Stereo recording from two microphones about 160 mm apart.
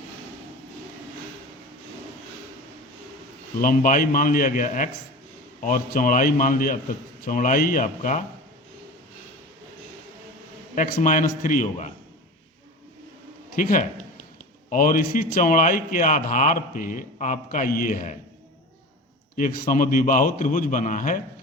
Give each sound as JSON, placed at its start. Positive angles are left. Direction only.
{"t": 3.6, "sound": "a man's voice", "side_deg": 60}
{"t": 10.9, "sound": "a man's voice", "side_deg": 55}
{"t": 13.6, "sound": "a man's voice", "side_deg": 60}
{"t": 19.4, "sound": "a man's voice", "side_deg": 60}